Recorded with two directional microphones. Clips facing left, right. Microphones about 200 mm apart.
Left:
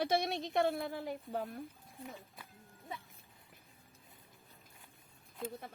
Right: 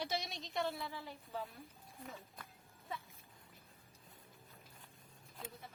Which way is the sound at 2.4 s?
5° left (ahead or behind).